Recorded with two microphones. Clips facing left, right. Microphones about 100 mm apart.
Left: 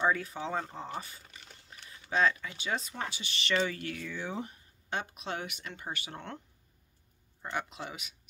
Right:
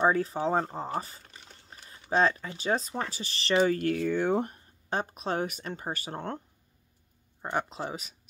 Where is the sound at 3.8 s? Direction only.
50° right (ahead or behind).